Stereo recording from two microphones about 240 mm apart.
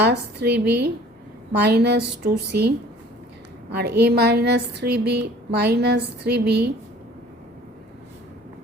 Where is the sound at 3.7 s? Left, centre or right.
Right.